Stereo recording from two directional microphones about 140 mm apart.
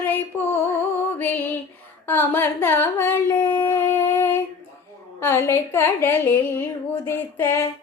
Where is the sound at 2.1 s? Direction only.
15° left (ahead or behind).